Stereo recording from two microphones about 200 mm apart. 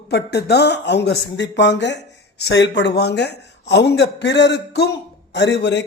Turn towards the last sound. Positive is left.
turn(degrees=60)  # may be behind; listen again after turning